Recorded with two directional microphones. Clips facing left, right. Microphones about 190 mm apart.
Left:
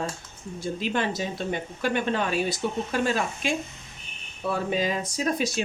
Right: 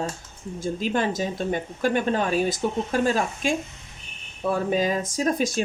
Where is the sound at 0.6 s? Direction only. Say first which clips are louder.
Right 3 dB; 45° right (ahead or behind).